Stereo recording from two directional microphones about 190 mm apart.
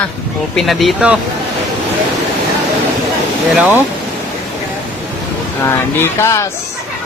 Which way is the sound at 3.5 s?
5° right (ahead or behind).